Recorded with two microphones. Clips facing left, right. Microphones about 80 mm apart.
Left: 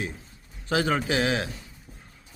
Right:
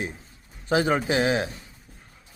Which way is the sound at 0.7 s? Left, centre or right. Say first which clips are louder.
Right 2 dB; right.